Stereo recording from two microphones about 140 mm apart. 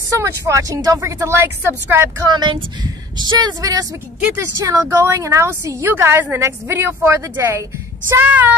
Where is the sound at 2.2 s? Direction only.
30° right (ahead or behind).